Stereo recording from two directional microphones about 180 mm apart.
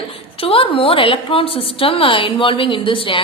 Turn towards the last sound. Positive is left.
turn(degrees=30)  # may be behind; listen again after turning